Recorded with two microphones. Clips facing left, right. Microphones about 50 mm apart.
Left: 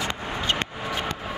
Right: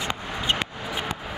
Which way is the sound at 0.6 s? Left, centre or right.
Centre.